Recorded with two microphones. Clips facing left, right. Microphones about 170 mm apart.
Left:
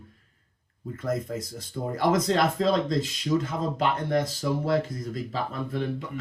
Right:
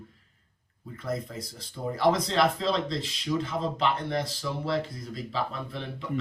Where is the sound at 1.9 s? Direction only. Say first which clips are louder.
Left 1 dB; 50° left (ahead or behind).